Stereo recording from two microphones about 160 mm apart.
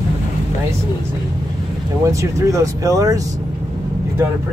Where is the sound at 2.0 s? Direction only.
20° right (ahead or behind).